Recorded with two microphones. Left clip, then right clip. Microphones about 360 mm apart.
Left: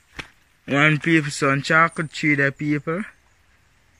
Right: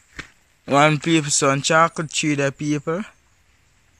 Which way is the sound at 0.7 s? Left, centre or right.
Centre.